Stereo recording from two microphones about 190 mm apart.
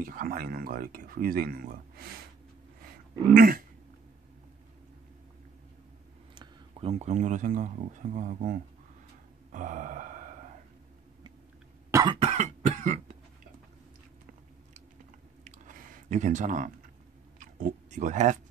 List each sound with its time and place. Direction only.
0.0 s speech: 45° right (ahead or behind)
3.3 s speech: 50° right (ahead or behind)
6.3 s speech: 25° right (ahead or behind)
9.5 s a sound: 40° right (ahead or behind)
11.9 s cough: 20° right (ahead or behind)
12.2 s cough: 35° right (ahead or behind)
15.4 s chewing: 45° right (ahead or behind)
17.4 s speech: 45° right (ahead or behind)